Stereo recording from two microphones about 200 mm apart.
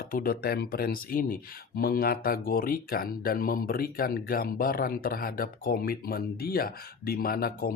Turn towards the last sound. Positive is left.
turn(degrees=50)  # may be behind; listen again after turning